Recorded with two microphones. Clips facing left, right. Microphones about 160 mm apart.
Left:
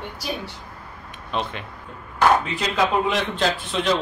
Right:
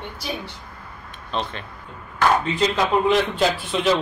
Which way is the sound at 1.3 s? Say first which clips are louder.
Even; 10° left (ahead or behind).